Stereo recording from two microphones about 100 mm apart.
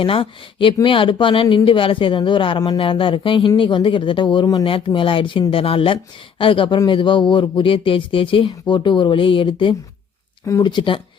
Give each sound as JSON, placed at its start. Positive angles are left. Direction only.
{"t": 0.0, "sound": "speech", "side_deg": 60}